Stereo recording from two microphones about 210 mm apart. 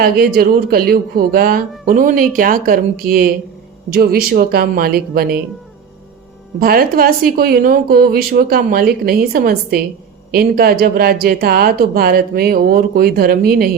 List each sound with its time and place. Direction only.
0.0 s speech: 45° right (ahead or behind)
6.6 s speech: 45° right (ahead or behind)